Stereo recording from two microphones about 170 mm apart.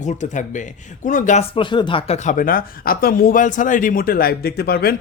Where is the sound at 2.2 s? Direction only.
50° left (ahead or behind).